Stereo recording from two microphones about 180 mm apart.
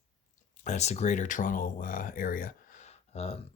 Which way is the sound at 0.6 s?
40° left (ahead or behind).